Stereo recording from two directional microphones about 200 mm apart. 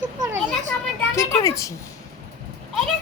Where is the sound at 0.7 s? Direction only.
15° left (ahead or behind).